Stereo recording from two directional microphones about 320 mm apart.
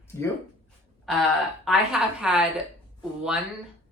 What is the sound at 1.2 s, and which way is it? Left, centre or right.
Speech, centre.